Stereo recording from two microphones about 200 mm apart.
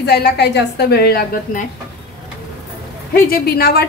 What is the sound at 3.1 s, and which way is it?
Speech, 50° left (ahead or behind).